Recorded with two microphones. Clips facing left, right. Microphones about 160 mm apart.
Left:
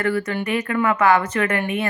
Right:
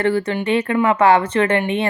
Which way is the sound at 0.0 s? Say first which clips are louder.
Right 4 dB; 30° right (ahead or behind).